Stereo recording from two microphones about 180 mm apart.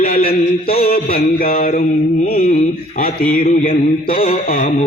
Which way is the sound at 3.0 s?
50° left (ahead or behind).